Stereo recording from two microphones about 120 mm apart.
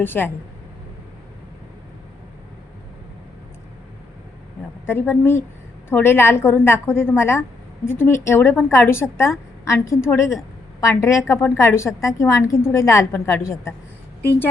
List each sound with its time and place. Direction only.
0.0 s speech: 15° left (ahead or behind)
4.9 s a woman's voice: 20° left (ahead or behind)